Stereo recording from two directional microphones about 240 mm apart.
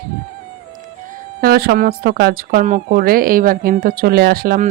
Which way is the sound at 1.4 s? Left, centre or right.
Right.